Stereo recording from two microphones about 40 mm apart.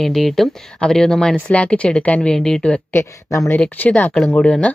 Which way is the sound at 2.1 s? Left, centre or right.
Centre.